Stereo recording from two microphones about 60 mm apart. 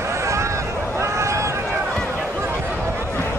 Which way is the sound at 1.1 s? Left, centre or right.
Right.